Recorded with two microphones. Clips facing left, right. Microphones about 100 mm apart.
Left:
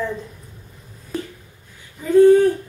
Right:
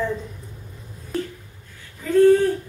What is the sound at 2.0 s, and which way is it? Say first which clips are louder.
Speech: left 3 dB; 15° left (ahead or behind).